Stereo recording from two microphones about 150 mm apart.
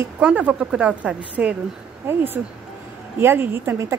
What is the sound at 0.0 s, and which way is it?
A woman's voice, 10° right (ahead or behind).